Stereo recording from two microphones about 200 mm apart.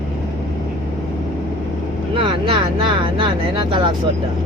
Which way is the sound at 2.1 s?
25° right (ahead or behind).